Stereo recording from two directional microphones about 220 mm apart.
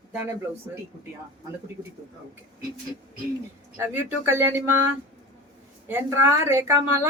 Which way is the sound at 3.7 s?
10° right (ahead or behind).